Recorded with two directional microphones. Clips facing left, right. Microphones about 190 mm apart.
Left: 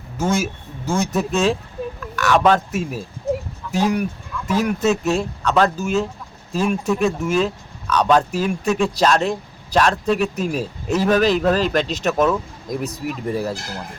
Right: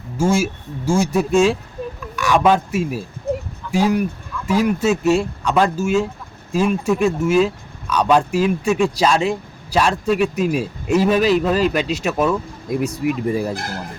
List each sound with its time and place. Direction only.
0.2 s a man's voice: 10° right (ahead or behind)
3.3 s a sound: 60° right (ahead or behind)
3.7 s speech: 10° right (ahead or behind)
13.5 s speech: 55° right (ahead or behind)